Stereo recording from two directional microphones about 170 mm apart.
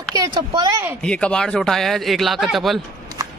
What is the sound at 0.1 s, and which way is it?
Speech, 25° right (ahead or behind).